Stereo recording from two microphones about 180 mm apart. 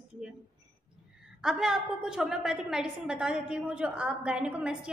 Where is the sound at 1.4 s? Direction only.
5° right (ahead or behind).